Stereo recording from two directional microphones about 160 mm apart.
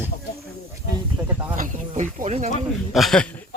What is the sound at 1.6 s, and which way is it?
Speech, 55° right (ahead or behind).